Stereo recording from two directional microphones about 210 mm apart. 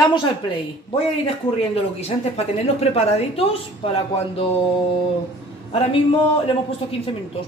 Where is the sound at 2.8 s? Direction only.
30° left (ahead or behind).